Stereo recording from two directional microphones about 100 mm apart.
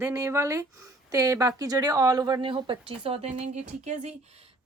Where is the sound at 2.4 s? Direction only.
55° right (ahead or behind); by 3.3 s 80° right.